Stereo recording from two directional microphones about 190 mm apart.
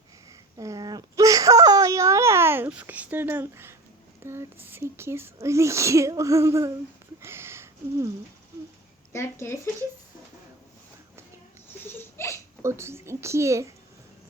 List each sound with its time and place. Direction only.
0.5 s whimper: 20° right (ahead or behind)
4.2 s speech: 15° right (ahead or behind)
7.2 s a sound: 15° right (ahead or behind)
9.1 s speech: 15° left (ahead or behind)
11.9 s a sound: 10° left (ahead or behind)
12.6 s speech: 15° right (ahead or behind)